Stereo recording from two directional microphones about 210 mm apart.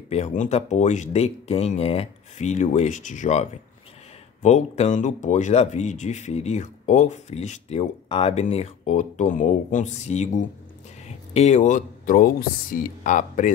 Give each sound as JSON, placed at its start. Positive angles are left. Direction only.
{"t": 0.1, "sound": "speech", "side_deg": 35}